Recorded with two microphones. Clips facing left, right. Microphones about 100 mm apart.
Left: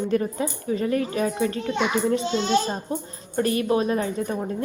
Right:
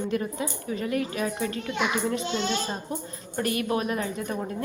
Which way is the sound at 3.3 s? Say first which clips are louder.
Left 5 dB; 30° left (ahead or behind).